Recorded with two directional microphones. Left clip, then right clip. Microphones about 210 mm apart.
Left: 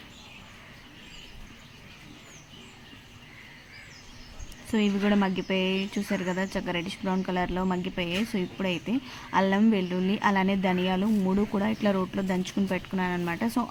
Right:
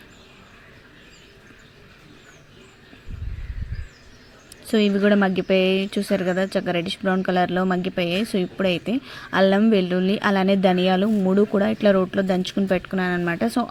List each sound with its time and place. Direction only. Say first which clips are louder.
4.7 s speech: right 8 dB; 20° right (ahead or behind)